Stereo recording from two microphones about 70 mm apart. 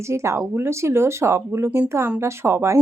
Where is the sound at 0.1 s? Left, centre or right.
Right.